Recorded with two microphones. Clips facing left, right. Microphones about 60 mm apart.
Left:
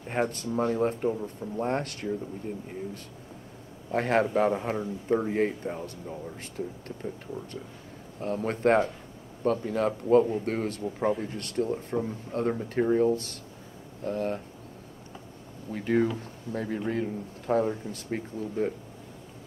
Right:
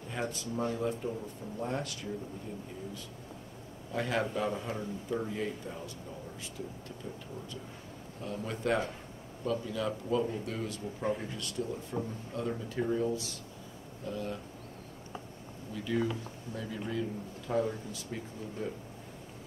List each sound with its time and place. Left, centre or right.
0.1 s a man's voice: left
3.9 s a man's voice: left
8.2 s a man's voice: left
15.7 s a man's voice: left